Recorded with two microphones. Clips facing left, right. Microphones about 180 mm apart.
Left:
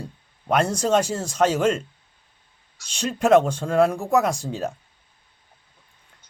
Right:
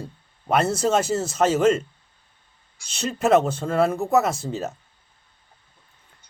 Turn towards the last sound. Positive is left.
turn(degrees=-5)  # may be behind; listen again after turning